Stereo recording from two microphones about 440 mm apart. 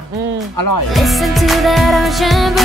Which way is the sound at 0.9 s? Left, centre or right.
Centre.